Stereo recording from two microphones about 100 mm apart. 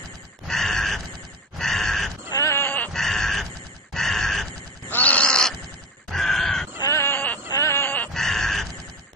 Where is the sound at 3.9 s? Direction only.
5° left (ahead or behind).